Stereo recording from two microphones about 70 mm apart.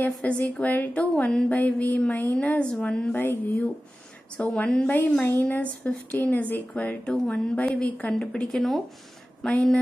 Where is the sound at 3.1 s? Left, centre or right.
Left; by 9.6 s centre.